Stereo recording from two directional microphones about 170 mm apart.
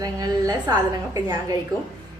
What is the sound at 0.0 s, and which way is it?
A woman's voice, 20° right (ahead or behind).